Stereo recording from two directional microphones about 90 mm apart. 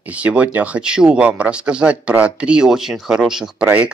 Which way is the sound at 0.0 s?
15° right (ahead or behind).